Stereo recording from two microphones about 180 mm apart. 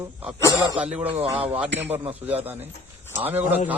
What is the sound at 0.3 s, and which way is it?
Speech, 15° left (ahead or behind).